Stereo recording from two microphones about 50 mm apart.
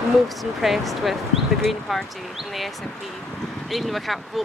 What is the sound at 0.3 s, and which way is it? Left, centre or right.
Speech, centre.